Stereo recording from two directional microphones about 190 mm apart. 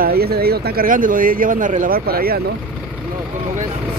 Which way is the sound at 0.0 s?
55° right (ahead or behind).